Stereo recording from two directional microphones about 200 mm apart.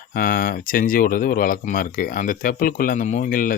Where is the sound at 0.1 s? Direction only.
45° left (ahead or behind).